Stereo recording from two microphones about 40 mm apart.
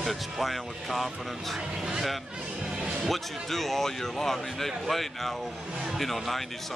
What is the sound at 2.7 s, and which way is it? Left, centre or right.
Music, right.